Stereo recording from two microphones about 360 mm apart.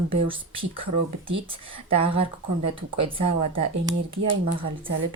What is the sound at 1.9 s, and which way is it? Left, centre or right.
Speech, centre.